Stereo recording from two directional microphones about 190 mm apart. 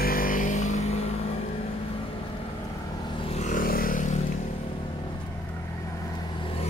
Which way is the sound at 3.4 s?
45° left (ahead or behind).